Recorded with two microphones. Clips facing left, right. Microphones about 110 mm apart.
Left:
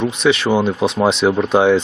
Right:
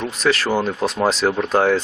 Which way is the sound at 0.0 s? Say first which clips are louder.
Left 4 dB; centre (ahead or behind).